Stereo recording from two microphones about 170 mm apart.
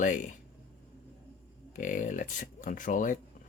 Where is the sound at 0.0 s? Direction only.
45° left (ahead or behind).